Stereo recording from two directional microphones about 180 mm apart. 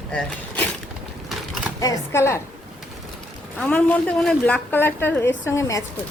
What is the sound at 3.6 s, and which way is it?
A woman's voice, 10° left (ahead or behind).